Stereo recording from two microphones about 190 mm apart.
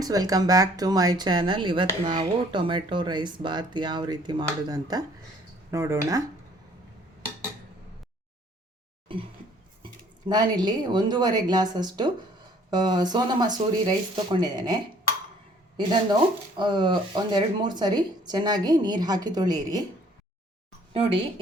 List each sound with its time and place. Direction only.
0.0 s speech: 20° right (ahead or behind)
10.2 s speech: 20° right (ahead or behind)
16.6 s speech: 25° right (ahead or behind)
20.9 s speech: 30° right (ahead or behind)